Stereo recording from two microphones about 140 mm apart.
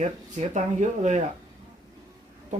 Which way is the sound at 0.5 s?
55° right (ahead or behind).